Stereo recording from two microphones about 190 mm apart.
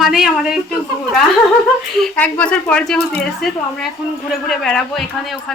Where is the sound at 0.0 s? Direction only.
Centre (ahead or behind).